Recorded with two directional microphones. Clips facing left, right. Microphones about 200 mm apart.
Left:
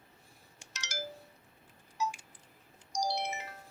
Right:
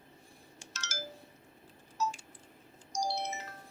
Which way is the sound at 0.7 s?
15° left (ahead or behind).